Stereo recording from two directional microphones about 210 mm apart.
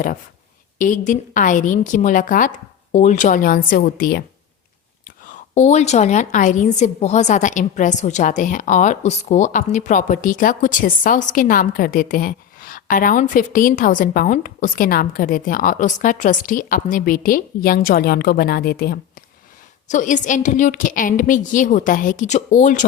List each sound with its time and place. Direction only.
0.8 s a woman's voice: 40° left (ahead or behind)